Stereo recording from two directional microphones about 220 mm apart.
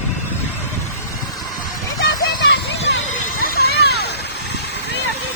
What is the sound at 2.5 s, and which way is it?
Children playing, 55° left (ahead or behind).